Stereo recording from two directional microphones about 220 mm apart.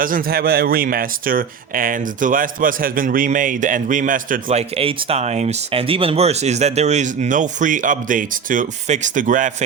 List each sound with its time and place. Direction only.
0.0 s speech: 40° right (ahead or behind)
4.4 s speech: 25° right (ahead or behind)